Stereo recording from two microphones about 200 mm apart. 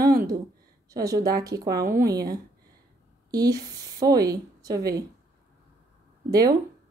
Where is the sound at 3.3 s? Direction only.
20° right (ahead or behind).